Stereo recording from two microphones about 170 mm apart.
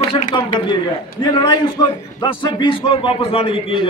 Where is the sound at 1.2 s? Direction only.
30° left (ahead or behind).